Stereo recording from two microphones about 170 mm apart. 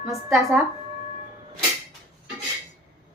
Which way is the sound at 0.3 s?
15° right (ahead or behind).